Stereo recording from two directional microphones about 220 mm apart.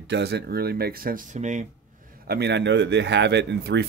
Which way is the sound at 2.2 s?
45° right (ahead or behind).